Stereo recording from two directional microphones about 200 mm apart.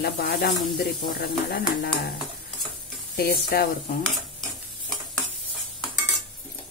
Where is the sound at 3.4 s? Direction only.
50° left (ahead or behind).